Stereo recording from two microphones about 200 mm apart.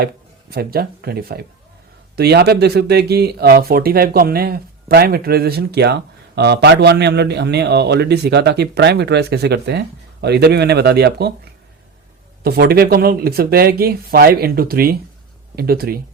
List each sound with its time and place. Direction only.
0.5 s speech: 50° right (ahead or behind)
12.4 s speech: 50° right (ahead or behind)